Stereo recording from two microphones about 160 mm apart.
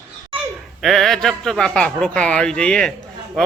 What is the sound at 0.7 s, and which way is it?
Speech, centre (ahead or behind).